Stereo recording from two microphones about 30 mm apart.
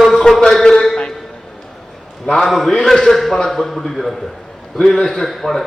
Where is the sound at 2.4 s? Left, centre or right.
Centre.